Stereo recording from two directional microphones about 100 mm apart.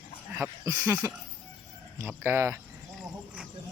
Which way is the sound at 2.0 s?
25° right (ahead or behind).